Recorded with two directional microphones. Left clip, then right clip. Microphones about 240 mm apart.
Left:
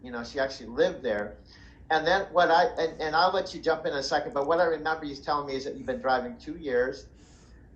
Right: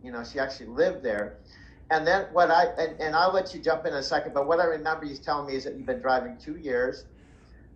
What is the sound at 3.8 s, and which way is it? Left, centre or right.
Speech, centre.